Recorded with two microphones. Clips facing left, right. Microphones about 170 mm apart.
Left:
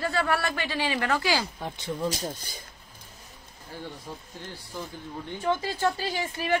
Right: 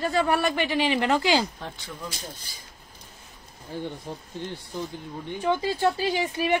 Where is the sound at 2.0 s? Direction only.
45° left (ahead or behind).